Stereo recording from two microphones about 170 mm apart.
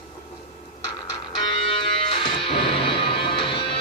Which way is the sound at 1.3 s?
30° left (ahead or behind).